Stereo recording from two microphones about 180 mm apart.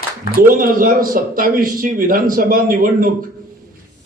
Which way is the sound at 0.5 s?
50° right (ahead or behind).